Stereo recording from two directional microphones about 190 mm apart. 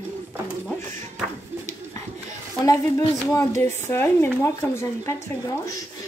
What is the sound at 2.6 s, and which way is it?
A child's voice, 15° left (ahead or behind).